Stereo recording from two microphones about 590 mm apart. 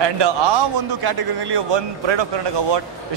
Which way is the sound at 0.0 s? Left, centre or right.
Right.